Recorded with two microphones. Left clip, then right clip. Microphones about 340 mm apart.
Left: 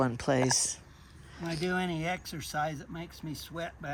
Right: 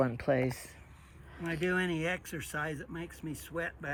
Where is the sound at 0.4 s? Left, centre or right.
Left.